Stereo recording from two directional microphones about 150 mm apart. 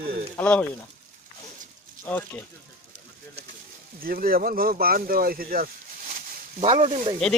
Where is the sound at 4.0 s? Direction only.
80° right.